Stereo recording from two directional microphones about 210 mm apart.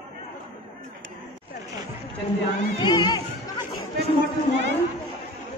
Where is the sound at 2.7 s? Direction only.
20° left (ahead or behind).